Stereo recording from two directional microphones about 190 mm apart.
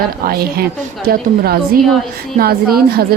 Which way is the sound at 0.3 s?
55° right (ahead or behind).